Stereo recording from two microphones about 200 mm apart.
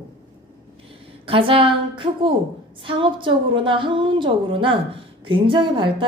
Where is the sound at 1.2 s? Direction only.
25° right (ahead or behind).